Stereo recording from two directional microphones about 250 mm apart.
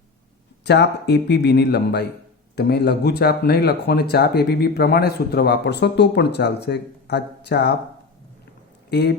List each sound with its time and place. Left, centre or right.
0.6 s speech: left
8.9 s speech: left